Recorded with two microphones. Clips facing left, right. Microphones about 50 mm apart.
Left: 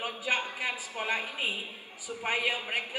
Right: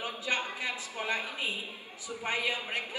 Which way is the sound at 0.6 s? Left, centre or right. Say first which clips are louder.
Left 2 dB; centre.